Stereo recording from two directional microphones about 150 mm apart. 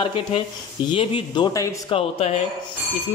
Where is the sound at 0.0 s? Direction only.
35° left (ahead or behind).